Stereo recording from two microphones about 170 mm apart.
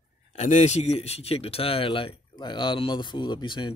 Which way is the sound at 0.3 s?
45° left (ahead or behind).